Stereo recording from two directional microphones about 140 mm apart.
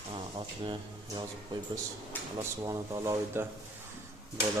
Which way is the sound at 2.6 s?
25° right (ahead or behind).